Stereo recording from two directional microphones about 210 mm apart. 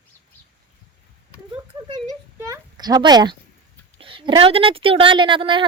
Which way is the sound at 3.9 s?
25° right (ahead or behind).